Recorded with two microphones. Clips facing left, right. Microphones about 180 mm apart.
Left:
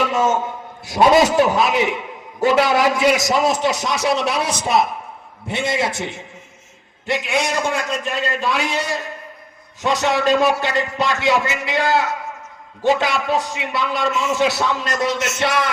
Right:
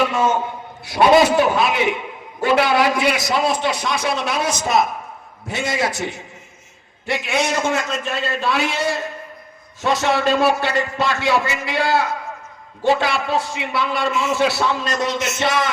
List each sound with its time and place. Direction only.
0.1 s a man's voice: 45° left (ahead or behind); by 15.7 s 10° left (ahead or behind)